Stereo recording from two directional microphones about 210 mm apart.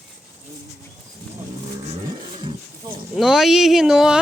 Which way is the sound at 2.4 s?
25° right (ahead or behind).